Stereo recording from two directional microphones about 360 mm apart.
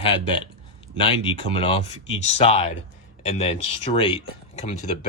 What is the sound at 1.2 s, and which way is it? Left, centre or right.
Speech, centre.